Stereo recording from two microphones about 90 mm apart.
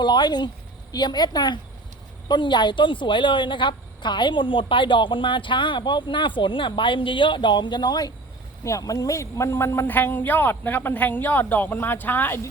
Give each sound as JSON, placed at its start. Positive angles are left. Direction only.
{"t": 0.0, "sound": "a woman's voice", "side_deg": 55}
{"t": 8.6, "sound": "speech", "side_deg": 40}